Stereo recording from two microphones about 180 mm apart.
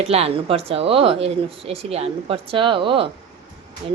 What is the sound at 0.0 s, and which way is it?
Speech, 35° right (ahead or behind).